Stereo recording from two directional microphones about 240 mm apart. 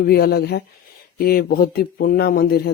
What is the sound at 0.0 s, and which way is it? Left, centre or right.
Speech, left.